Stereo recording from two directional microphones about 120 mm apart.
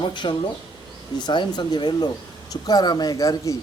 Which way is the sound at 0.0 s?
40° left (ahead or behind).